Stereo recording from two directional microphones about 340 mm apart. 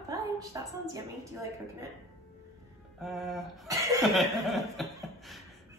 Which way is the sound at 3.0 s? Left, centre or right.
Centre.